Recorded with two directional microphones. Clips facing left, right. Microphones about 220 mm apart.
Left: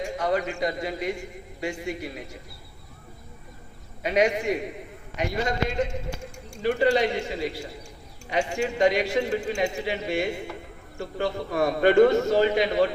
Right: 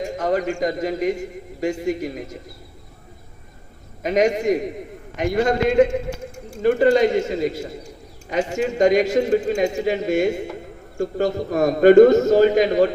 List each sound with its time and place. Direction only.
0.0 s a man's voice: 45° right (ahead or behind)
4.0 s speech: 45° right (ahead or behind)